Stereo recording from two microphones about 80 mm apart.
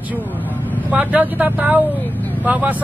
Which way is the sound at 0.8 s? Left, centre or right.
Right.